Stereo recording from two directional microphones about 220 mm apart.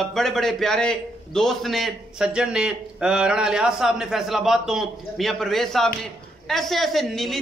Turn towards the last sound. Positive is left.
turn(degrees=0)  # may be behind; listen again after turning